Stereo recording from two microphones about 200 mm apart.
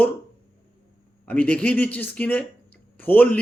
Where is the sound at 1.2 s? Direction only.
5° left (ahead or behind).